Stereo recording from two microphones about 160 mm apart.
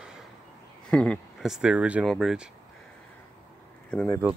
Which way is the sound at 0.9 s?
5° left (ahead or behind).